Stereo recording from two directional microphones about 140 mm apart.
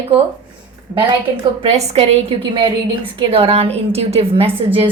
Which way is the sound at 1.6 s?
50° right (ahead or behind).